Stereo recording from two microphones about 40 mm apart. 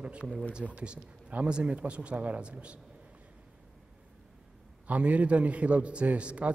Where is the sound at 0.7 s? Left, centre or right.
Right.